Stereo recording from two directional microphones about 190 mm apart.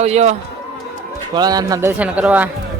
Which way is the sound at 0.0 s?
35° right (ahead or behind).